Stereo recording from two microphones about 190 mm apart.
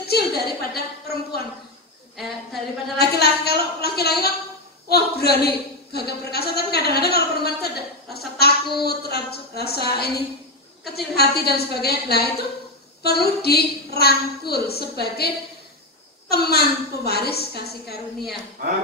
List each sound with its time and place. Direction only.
0.0 s a woman's voice: 55° left (ahead or behind)
2.1 s speech: centre (ahead or behind)
3.0 s a man's voice: 55° left (ahead or behind)
18.6 s speech: 55° right (ahead or behind)